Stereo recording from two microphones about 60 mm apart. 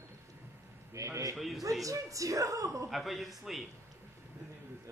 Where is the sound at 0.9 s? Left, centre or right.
Right.